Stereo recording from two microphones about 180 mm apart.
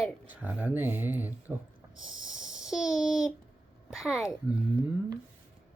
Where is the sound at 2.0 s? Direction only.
5° right (ahead or behind).